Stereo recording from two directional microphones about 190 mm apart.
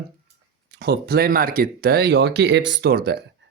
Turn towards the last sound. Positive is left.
turn(degrees=-55)  # may be behind; listen again after turning